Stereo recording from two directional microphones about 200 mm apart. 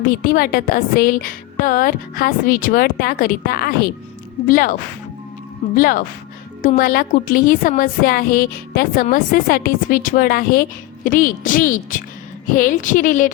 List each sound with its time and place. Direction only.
0.1 s a woman's voice: 45° left (ahead or behind)